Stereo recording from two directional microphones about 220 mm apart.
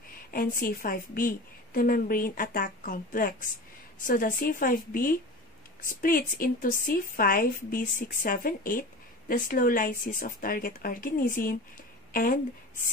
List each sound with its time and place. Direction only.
0.3 s a woman's voice: 40° left (ahead or behind)